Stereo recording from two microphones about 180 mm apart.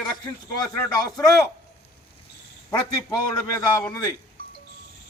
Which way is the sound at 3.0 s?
20° left (ahead or behind).